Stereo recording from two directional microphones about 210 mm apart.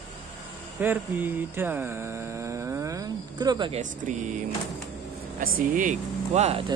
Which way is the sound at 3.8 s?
35° right (ahead or behind).